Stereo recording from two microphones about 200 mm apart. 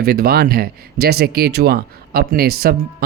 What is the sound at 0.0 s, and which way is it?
Speech, 50° right (ahead or behind).